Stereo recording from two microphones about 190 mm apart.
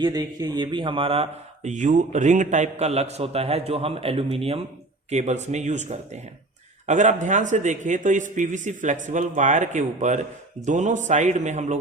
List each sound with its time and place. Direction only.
0.0 s speech: 20° right (ahead or behind); by 11.8 s 40° right (ahead or behind)